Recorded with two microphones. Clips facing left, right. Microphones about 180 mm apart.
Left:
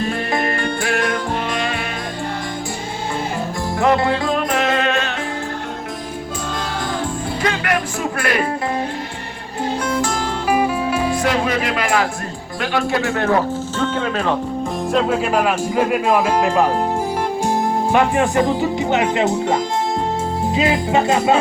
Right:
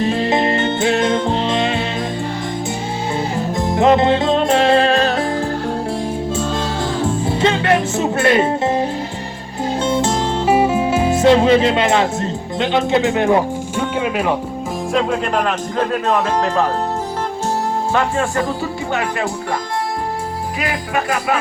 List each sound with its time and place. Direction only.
0.0 s music: 20° right (ahead or behind)
3.8 s music: 20° right (ahead or behind)
7.0 s music: 25° right (ahead or behind)
9.8 s music: 25° right (ahead or behind)
12.7 s speech: 20° right (ahead or behind)
14.9 s speech: 5° left (ahead or behind)
17.9 s speech: 15° left (ahead or behind)
20.6 s speech: 25° left (ahead or behind)